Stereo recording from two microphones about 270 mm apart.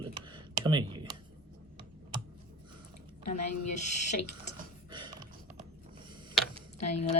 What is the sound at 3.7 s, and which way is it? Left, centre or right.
Speech, left.